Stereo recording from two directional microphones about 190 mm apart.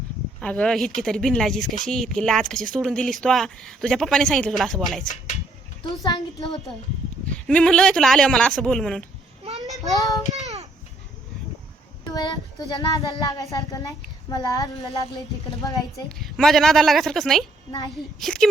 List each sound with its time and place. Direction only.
0.3 s speech: 5° left (ahead or behind)
6.0 s speech: 20° left (ahead or behind)
7.3 s speech: 5° left (ahead or behind)
9.7 s child singing: centre (ahead or behind)
12.1 s speech: 20° left (ahead or behind)
16.0 s speech: centre (ahead or behind)